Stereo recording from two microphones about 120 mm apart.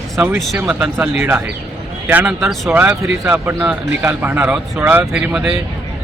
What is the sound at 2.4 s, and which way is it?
Speech, centre (ahead or behind).